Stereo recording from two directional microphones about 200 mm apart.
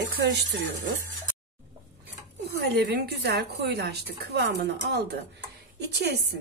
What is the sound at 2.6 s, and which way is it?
A woman's voice, 55° right (ahead or behind).